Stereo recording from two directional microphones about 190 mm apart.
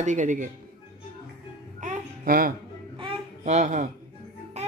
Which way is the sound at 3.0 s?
30° right (ahead or behind).